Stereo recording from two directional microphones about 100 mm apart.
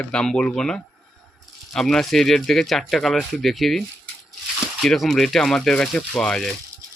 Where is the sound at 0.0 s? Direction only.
10° left (ahead or behind).